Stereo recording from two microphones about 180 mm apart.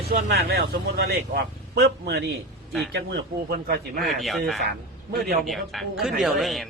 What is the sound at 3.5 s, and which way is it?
Speech, 60° right (ahead or behind).